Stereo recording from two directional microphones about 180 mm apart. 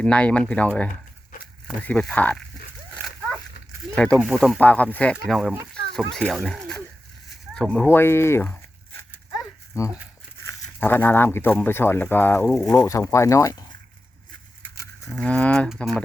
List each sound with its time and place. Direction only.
0.0 s speech: 5° left (ahead or behind)
2.9 s dog: centre (ahead or behind)
3.9 s speech: 5° left (ahead or behind)
5.7 s dog: 5° left (ahead or behind)
7.5 s speech: 5° left (ahead or behind)
9.0 s a sound: 15° left (ahead or behind)
10.4 s speech: 10° left (ahead or behind)
15.1 s speech: 5° left (ahead or behind)